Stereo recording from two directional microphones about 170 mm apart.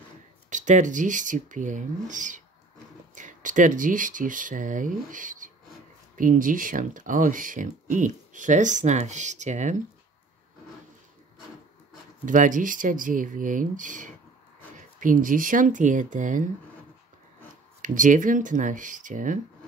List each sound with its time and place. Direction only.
0.5 s speech: 45° right (ahead or behind)
12.3 s speech: 50° right (ahead or behind)
17.8 s speech: 50° right (ahead or behind)